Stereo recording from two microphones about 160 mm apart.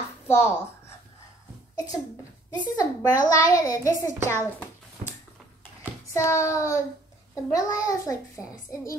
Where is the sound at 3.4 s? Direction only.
20° left (ahead or behind).